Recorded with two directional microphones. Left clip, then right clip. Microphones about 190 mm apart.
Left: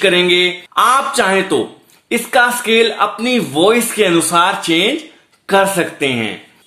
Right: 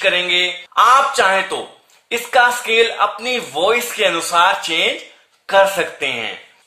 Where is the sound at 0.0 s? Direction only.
20° left (ahead or behind).